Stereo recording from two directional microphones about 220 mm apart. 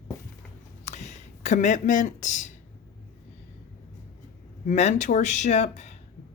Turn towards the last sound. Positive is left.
turn(degrees=30)  # may be behind; listen again after turning